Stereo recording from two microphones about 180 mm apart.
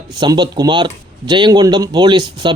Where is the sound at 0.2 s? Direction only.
25° right (ahead or behind).